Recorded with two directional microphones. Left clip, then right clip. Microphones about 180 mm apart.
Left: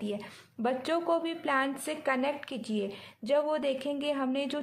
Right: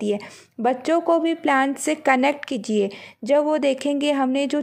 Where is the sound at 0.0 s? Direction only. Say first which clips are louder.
Right 12 dB; 40° right (ahead or behind).